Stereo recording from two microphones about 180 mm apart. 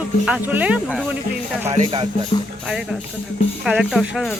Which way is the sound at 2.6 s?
5° right (ahead or behind).